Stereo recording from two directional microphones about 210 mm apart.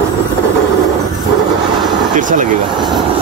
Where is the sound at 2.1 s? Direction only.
40° right (ahead or behind).